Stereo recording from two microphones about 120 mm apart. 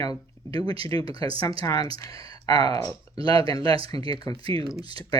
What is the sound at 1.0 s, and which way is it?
Speech, 50° right (ahead or behind).